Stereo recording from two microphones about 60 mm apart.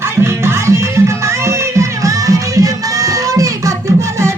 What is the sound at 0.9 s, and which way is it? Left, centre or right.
Music, right.